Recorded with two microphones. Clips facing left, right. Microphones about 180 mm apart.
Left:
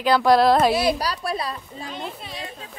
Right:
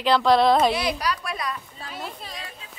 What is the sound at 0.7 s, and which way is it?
Speech, 30° left (ahead or behind).